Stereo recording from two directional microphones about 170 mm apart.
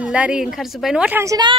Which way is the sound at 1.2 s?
25° right (ahead or behind).